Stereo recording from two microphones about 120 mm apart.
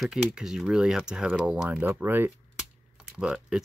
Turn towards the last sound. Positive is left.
turn(degrees=-5)  # may be behind; listen again after turning